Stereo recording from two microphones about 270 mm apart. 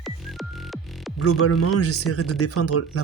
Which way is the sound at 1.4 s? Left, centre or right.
Left.